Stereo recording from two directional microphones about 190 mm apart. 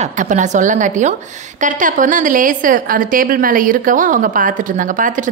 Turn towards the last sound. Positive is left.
turn(degrees=-45)  # may be behind; listen again after turning